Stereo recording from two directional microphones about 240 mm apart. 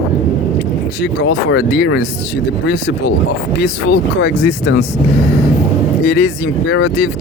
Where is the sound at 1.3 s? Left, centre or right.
Left.